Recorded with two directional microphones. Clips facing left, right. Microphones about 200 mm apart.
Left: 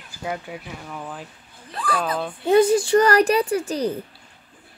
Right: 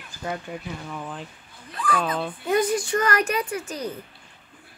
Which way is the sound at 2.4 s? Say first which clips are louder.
Left 7 dB; 30° left (ahead or behind).